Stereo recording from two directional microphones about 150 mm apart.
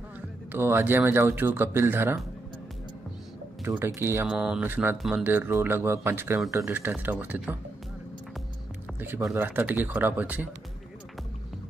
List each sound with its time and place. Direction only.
0.5 s speech: 15° right (ahead or behind)
3.6 s speech: 15° right (ahead or behind)
4.3 s speech: 5° right (ahead or behind)
5.2 s speech: 15° right (ahead or behind)
9.3 s speech: 15° right (ahead or behind)